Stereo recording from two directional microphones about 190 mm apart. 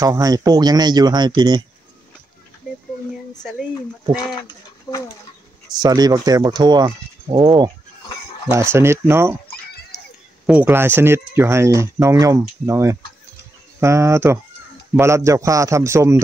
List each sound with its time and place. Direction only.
0.0 s speech: 20° right (ahead or behind)
5.8 s speech: 20° right (ahead or behind)
10.4 s speech: 5° right (ahead or behind)